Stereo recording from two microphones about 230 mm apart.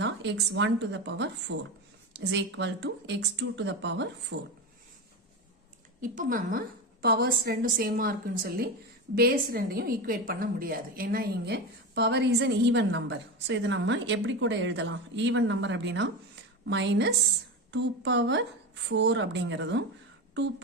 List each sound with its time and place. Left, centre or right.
0.0 s a woman's voice: right
6.0 s a woman's voice: right